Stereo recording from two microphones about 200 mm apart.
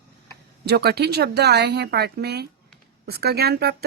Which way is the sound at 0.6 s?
55° right (ahead or behind).